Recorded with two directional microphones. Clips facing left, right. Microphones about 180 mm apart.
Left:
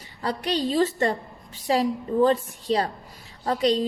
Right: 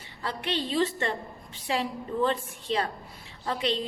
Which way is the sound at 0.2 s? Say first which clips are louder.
Left 5 dB; 40° left (ahead or behind).